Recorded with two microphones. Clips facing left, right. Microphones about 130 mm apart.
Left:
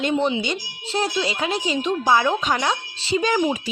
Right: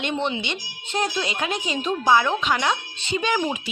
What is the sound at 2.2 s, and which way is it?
Speech, 40° left (ahead or behind).